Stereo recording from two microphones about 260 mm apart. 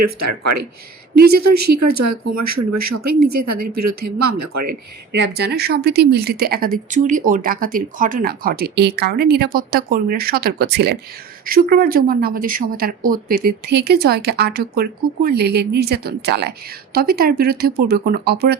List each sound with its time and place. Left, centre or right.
0.0 s speech: right
3.1 s speech: right
3.3 s speech: right
4.7 s speech: right